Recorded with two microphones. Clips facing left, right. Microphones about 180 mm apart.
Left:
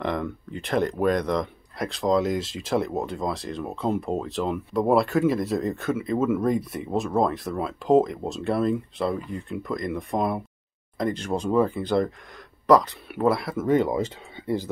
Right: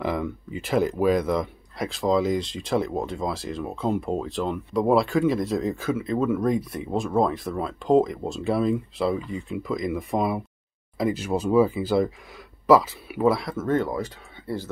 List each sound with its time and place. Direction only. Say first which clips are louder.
0.0 s speech: right 1 dB; 5° right (ahead or behind)
13.6 s speech: left 3 dB; 15° left (ahead or behind)